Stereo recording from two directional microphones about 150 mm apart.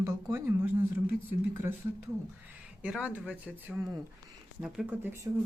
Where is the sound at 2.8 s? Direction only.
10° right (ahead or behind).